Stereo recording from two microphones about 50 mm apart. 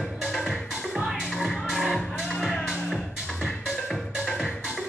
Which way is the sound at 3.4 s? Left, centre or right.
Centre.